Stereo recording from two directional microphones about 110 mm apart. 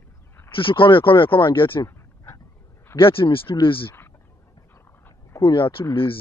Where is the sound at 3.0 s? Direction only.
55° left (ahead or behind).